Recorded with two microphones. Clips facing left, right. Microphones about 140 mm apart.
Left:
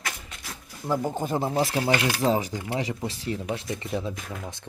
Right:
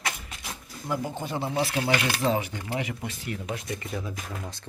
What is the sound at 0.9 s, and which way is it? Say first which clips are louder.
Speech: left 4 dB; 40° left (ahead or behind).